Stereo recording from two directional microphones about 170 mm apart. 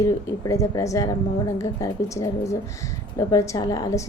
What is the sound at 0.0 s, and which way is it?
A woman's voice, 20° left (ahead or behind).